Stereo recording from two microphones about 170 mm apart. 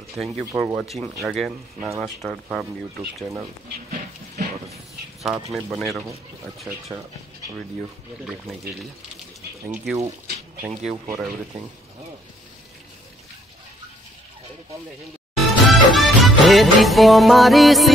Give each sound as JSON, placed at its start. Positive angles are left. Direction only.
{"t": 0.2, "sound": "speech", "side_deg": 0}
{"t": 0.5, "sound": "speech", "side_deg": -20}
{"t": 1.2, "sound": "speech", "side_deg": 0}
{"t": 3.9, "sound": "music", "side_deg": -45}
{"t": 5.2, "sound": "speech", "side_deg": 0}
{"t": 15.3, "sound": "music", "side_deg": 0}